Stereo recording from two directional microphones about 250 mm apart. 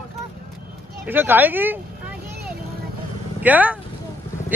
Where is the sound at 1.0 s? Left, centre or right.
Centre.